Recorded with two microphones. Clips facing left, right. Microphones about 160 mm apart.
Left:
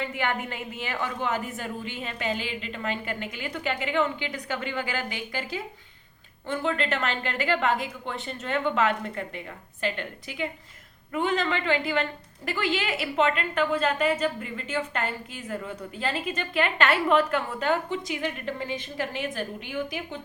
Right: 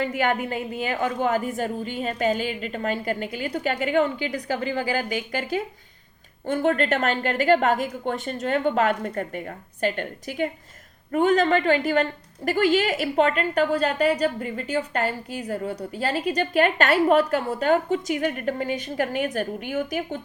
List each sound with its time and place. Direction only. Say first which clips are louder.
0.0 s a woman's voice: right 6 dB; 40° right (ahead or behind)